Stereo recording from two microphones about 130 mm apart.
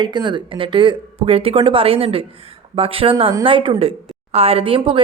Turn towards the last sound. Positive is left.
turn(degrees=-45)  # may be behind; listen again after turning